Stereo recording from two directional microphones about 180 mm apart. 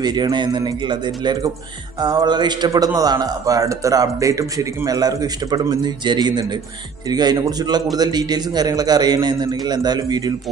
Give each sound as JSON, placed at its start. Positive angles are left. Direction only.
{"t": 0.0, "sound": "a man's voice", "side_deg": -25}